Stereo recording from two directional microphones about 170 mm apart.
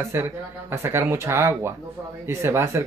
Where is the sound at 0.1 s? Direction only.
15° right (ahead or behind).